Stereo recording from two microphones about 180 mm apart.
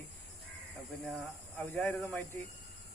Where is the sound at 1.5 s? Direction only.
10° left (ahead or behind).